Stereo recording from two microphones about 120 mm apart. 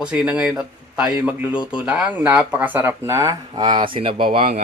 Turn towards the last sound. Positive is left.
turn(degrees=-55)  # may be behind; listen again after turning